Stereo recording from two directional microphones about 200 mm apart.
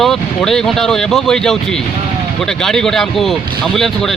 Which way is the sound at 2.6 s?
Centre (ahead or behind).